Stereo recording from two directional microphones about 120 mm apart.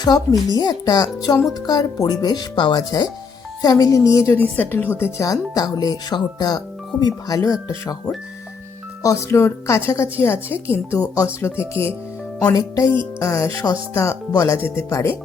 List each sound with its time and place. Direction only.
0.0 s a woman's voice: 30° left (ahead or behind)
13.1 s music: 25° left (ahead or behind)
13.9 s a woman's voice: 25° left (ahead or behind)